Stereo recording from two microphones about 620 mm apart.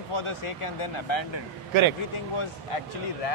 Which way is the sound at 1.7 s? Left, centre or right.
Right.